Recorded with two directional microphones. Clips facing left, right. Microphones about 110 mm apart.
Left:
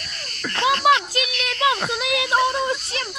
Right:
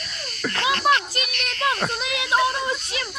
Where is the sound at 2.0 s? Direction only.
70° left (ahead or behind).